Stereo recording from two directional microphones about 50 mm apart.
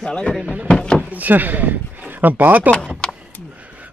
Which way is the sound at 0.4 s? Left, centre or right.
Right.